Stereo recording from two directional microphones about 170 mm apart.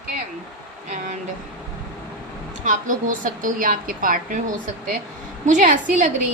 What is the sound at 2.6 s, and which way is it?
A woman's voice, 50° right (ahead or behind).